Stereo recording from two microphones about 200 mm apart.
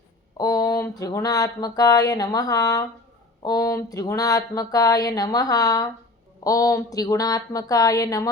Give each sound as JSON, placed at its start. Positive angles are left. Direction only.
{"t": 0.3, "sound": "speech", "side_deg": 20}